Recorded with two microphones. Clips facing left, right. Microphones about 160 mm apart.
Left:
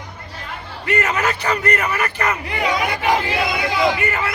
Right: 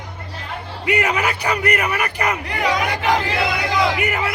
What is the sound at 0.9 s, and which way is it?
Speech, 15° right (ahead or behind).